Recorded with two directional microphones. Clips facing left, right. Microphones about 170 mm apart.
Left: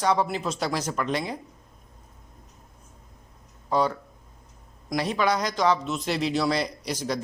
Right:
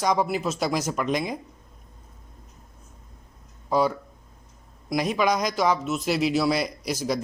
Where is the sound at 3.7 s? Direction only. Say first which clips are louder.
Right 2 dB; 10° right (ahead or behind).